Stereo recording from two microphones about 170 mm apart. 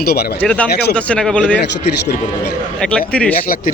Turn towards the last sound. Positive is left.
turn(degrees=5)  # may be behind; listen again after turning